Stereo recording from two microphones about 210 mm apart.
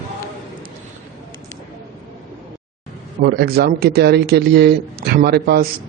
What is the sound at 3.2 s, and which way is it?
Speech, 50° right (ahead or behind).